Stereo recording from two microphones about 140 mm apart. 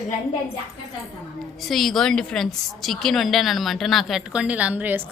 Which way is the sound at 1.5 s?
Centre (ahead or behind).